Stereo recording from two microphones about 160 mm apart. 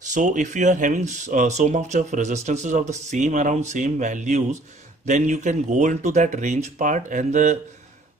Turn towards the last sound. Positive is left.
turn(degrees=-50)  # may be behind; listen again after turning